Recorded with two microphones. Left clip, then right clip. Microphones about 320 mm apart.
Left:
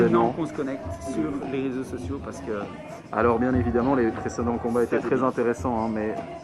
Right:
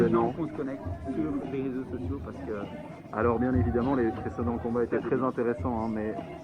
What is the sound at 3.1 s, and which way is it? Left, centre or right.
Speech, left.